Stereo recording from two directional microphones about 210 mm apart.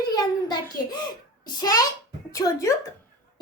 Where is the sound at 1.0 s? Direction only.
20° left (ahead or behind).